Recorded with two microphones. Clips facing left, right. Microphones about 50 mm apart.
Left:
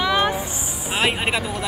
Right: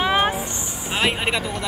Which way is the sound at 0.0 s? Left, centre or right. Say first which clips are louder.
Even; right.